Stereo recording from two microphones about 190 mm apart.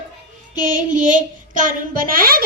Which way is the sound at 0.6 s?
45° right (ahead or behind).